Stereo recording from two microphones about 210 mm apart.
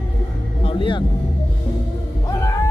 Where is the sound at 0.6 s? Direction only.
25° left (ahead or behind).